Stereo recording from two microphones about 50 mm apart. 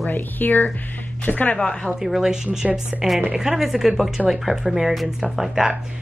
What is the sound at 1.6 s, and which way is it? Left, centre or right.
Speech, centre.